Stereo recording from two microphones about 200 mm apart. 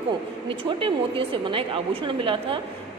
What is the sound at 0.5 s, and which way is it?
A woman's voice, 25° right (ahead or behind).